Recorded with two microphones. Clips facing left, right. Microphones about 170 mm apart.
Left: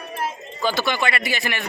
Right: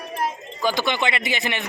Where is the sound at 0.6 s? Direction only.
15° right (ahead or behind).